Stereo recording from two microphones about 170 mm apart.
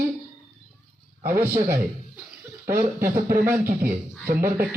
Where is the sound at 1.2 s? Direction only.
15° right (ahead or behind).